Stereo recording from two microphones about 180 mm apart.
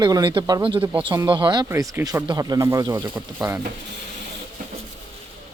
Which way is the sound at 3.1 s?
10° right (ahead or behind).